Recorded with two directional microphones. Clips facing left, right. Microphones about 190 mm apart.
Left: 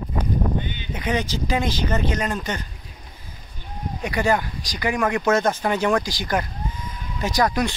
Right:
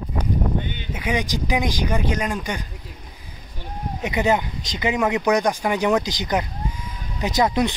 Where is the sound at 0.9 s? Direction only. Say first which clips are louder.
Even; 10° right (ahead or behind).